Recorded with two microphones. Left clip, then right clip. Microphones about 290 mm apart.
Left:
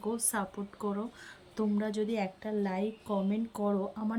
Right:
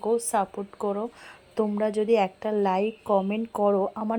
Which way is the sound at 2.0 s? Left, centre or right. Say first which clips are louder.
Right 11 dB; right.